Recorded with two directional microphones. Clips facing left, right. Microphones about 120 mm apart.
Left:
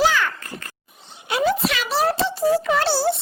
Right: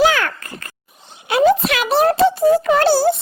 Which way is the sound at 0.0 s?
55° right (ahead or behind).